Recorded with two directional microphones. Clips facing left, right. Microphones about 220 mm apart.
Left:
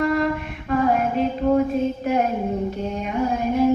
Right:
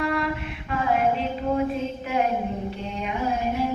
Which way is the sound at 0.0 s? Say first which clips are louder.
Left 5 dB; 45° left (ahead or behind).